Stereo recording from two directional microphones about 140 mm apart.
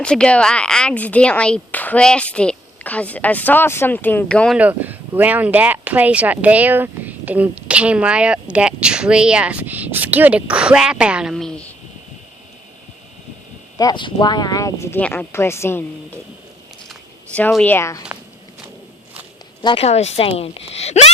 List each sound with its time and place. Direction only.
0.0 s speech: 5° left (ahead or behind)
4.5 s speech: 10° right (ahead or behind); by 11.7 s 5° left (ahead or behind)
13.7 s speech: 30° left (ahead or behind)
17.5 s speech: 10° left (ahead or behind)
19.6 s a woman's voice: 45° left (ahead or behind)